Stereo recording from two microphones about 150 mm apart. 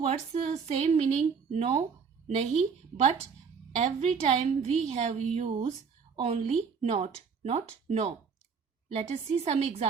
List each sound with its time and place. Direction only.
0.0 s speech: 45° right (ahead or behind)
3.8 s speech: 50° right (ahead or behind)